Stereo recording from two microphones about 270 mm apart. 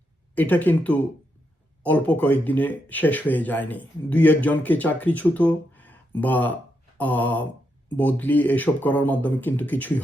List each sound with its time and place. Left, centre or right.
0.3 s speech: centre